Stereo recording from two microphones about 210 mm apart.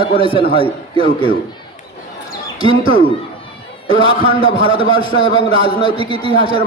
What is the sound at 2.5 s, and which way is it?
Speech, 25° right (ahead or behind).